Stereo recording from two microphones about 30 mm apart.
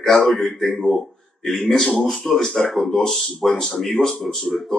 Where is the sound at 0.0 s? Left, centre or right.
Centre.